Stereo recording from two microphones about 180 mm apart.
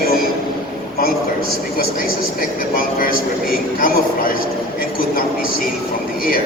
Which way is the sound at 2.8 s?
50° left (ahead or behind).